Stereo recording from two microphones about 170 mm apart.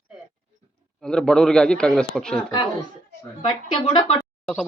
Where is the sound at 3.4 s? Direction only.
30° left (ahead or behind).